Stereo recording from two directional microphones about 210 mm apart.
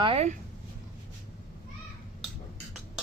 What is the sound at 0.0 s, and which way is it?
Speech, 30° right (ahead or behind).